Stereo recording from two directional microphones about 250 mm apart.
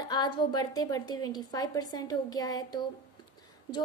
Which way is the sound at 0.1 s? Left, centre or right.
Centre.